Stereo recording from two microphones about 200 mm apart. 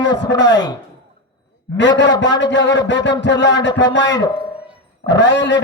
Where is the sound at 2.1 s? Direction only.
20° left (ahead or behind).